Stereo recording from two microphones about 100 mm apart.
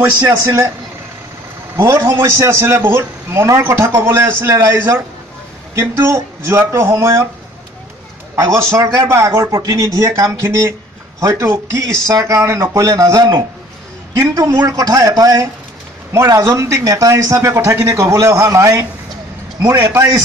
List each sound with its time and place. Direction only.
0.2 s a man's voice: 30° right (ahead or behind)
1.8 s a man's voice: 30° right (ahead or behind)
8.4 s a man's voice: 30° right (ahead or behind)